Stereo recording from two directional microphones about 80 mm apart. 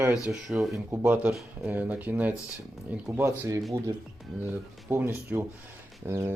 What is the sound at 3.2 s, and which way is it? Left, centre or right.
Speech, right.